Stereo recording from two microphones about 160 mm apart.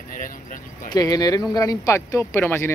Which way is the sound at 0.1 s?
60° left (ahead or behind).